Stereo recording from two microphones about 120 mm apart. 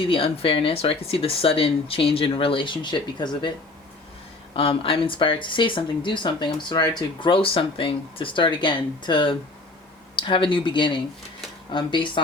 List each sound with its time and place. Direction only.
0.0 s speech: 50° left (ahead or behind)
4.5 s speech: 50° left (ahead or behind)